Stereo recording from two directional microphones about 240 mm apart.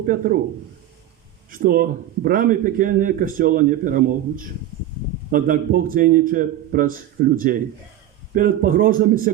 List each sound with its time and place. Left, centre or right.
0.0 s speech: right
1.5 s speech: right